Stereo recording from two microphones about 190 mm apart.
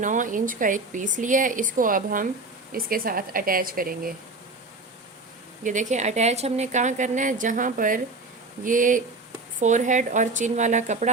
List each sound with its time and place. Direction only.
0.0 s a woman's voice: 45° right (ahead or behind)
5.6 s a woman's voice: 40° right (ahead or behind)